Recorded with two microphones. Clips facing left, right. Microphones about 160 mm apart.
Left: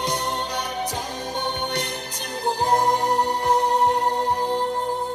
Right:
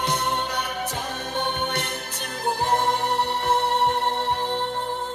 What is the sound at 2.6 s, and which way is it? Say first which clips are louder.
Music: left 3 dB; 40° left (ahead or behind).